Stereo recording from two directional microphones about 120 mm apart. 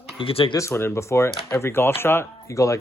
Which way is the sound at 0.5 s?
20° left (ahead or behind).